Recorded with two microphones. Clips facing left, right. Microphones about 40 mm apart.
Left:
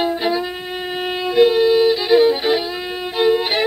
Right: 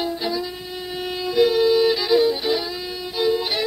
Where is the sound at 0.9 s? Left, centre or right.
Left.